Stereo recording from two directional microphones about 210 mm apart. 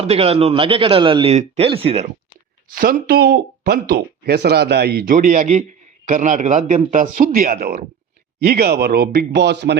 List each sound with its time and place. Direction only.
0.0 s a man's voice: 30° right (ahead or behind)
2.6 s speech: 40° right (ahead or behind)